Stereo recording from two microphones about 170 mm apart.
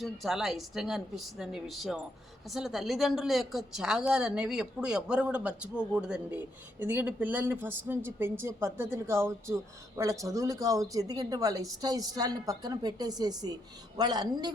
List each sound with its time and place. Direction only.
0.0 s a woman's voice: centre (ahead or behind); by 14.5 s 25° right (ahead or behind)